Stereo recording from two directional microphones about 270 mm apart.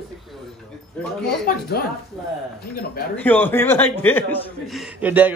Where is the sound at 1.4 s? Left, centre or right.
Left.